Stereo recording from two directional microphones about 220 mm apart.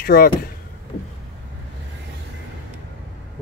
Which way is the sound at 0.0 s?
45° left (ahead or behind).